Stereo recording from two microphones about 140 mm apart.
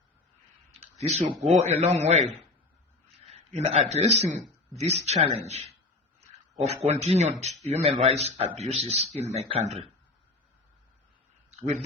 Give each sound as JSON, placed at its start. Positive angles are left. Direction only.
{"t": 0.7, "sound": "clicking", "side_deg": -50}
{"t": 1.5, "sound": "a man's voice", "side_deg": -50}